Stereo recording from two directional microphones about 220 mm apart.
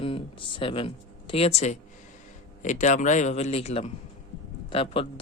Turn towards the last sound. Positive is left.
turn(degrees=25)  # may be behind; listen again after turning